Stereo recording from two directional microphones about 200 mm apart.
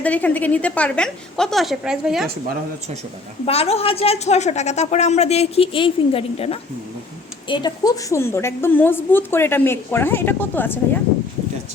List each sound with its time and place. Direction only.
0.0 s a woman's voice: 5° left (ahead or behind)
3.4 s a woman's voice: 30° left (ahead or behind); by 11.0 s 10° left (ahead or behind)